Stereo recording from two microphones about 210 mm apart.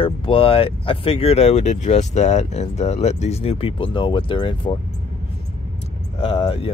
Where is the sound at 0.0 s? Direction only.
25° left (ahead or behind).